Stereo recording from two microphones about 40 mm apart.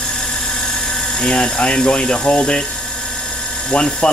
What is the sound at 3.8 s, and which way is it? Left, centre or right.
Speech, centre.